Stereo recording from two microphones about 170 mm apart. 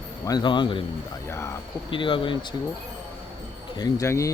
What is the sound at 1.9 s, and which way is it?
Speech, 30° left (ahead or behind).